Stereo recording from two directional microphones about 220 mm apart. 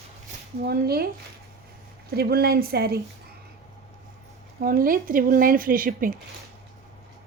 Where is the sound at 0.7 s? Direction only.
45° right (ahead or behind).